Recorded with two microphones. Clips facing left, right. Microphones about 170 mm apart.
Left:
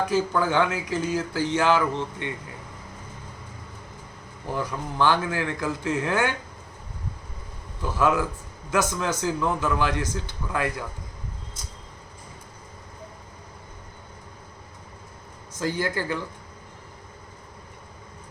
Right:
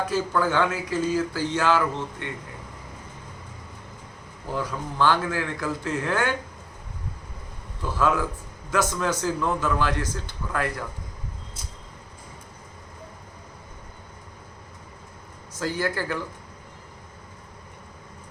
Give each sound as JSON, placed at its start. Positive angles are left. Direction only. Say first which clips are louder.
{"t": 0.0, "sound": "speech", "louder": "left 1 dB", "side_deg": 10}
{"t": 4.5, "sound": "speech", "louder": "even", "side_deg": 15}
{"t": 7.8, "sound": "speech", "louder": "left 1 dB", "side_deg": 10}
{"t": 15.8, "sound": "speech", "louder": "right 2 dB", "side_deg": 15}